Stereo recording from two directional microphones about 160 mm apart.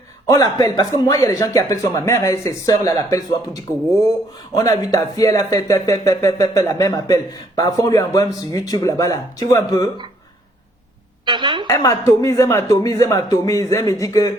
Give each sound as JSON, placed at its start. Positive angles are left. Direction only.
{"t": 0.3, "sound": "speech", "side_deg": 25}
{"t": 11.3, "sound": "a woman's voice", "side_deg": -30}
{"t": 11.7, "sound": "speech", "side_deg": 20}